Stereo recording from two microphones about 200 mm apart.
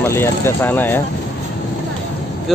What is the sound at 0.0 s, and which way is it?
Speech, 10° left (ahead or behind).